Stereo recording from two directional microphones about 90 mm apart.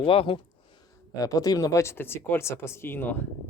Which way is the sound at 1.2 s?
40° left (ahead or behind).